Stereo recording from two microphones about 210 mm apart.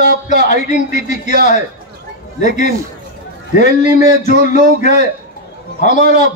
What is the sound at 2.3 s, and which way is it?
A man's voice, 35° left (ahead or behind).